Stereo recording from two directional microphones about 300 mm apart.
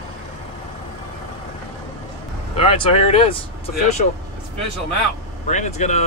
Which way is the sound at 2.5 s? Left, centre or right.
Centre.